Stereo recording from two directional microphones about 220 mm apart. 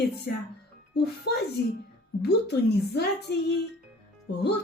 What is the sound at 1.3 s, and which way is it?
Speech, 50° left (ahead or behind).